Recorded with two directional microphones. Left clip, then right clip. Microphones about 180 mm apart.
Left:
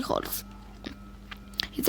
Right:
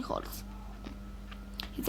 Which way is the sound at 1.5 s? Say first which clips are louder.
Left 9 dB; 30° left (ahead or behind).